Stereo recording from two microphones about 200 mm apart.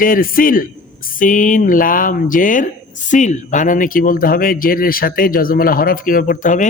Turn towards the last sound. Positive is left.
turn(degrees=40)  # may be behind; listen again after turning